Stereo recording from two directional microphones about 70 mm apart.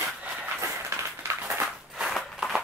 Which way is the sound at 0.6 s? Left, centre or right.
Right.